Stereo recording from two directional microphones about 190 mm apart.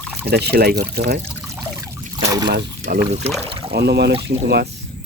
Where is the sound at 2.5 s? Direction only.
55° right (ahead or behind).